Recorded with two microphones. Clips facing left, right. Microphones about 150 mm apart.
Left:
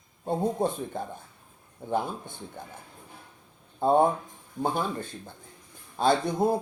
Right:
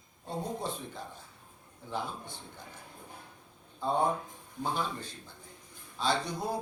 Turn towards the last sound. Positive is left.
turn(degrees=50)  # may be behind; listen again after turning